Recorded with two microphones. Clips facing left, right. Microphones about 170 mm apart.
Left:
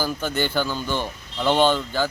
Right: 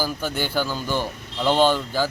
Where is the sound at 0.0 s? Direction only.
5° right (ahead or behind).